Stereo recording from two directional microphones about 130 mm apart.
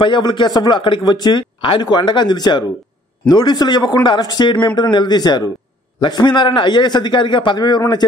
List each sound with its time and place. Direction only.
0.0 s a man's voice: 40° left (ahead or behind)